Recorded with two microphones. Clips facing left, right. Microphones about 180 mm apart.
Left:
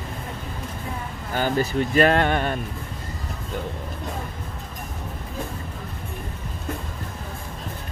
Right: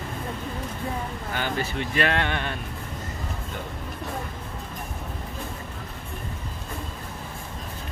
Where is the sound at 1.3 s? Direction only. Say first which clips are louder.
Left 7 dB; 40° left (ahead or behind).